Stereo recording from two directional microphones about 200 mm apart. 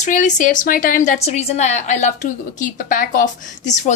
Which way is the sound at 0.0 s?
40° left (ahead or behind).